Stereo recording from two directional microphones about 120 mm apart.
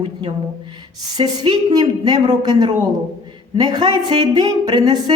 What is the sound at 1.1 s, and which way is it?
Speech, 35° right (ahead or behind).